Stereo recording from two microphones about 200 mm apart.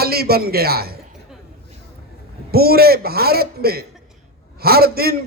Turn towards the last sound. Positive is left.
turn(degrees=-50)  # may be behind; listen again after turning